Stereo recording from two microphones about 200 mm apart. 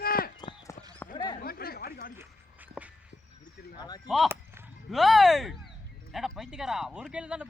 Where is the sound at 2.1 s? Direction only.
10° right (ahead or behind).